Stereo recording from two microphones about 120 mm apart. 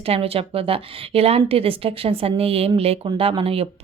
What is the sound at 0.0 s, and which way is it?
A woman's voice, 55° right (ahead or behind).